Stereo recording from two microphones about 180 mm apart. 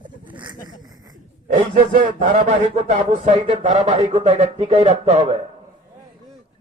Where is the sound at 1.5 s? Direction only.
45° right (ahead or behind).